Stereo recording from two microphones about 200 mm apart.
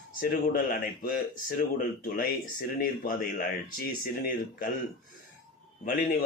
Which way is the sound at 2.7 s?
45° left (ahead or behind).